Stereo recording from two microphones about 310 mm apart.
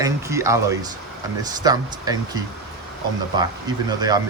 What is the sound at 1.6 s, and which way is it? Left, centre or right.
Speech, centre.